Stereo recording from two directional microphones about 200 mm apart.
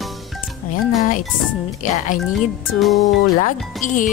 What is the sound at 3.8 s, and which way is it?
Speech, 40° left (ahead or behind).